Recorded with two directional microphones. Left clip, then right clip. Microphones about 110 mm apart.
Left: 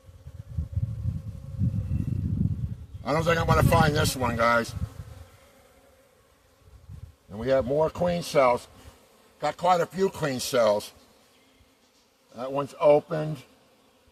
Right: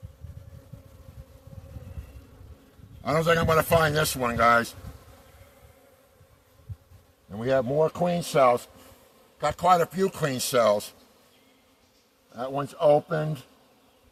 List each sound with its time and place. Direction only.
3.0 s a man's voice: 50° right (ahead or behind)
7.3 s a man's voice: 45° right (ahead or behind)
12.3 s a man's voice: 45° right (ahead or behind)